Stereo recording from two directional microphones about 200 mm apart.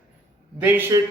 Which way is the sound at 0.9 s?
15° right (ahead or behind).